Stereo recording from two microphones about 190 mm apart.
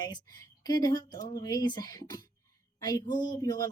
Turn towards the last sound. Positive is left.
turn(degrees=20)  # may be behind; listen again after turning